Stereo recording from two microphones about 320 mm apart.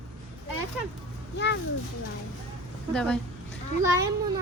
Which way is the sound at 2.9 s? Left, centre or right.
Centre.